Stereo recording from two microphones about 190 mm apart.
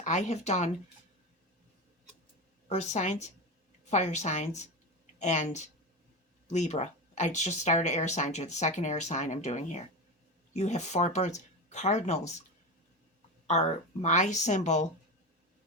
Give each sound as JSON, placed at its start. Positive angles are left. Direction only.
{"t": 0.0, "sound": "speech", "side_deg": 40}
{"t": 2.6, "sound": "speech", "side_deg": 35}
{"t": 13.5, "sound": "speech", "side_deg": 35}